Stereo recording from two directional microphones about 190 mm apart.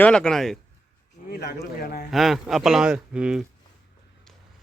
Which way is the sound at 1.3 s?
55° left (ahead or behind).